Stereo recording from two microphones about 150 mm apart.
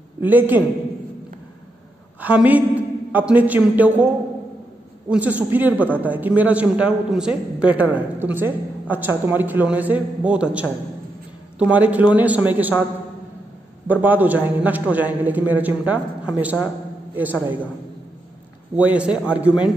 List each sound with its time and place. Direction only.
0.2 s a woman's voice: 10° right (ahead or behind)
2.1 s a woman's voice: 10° right (ahead or behind)
5.1 s a woman's voice: 10° right (ahead or behind)
13.8 s a woman's voice: 10° right (ahead or behind)
18.8 s a woman's voice: 10° right (ahead or behind)